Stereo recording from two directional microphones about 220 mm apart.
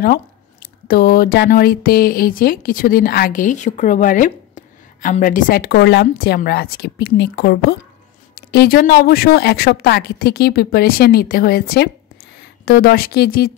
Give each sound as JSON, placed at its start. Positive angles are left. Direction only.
{"t": 0.0, "sound": "speech", "side_deg": 40}